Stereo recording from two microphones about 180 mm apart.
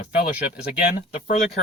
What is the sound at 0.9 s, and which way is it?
Speech, 55° left (ahead or behind).